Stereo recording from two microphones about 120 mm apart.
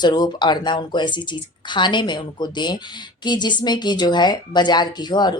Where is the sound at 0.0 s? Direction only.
40° left (ahead or behind).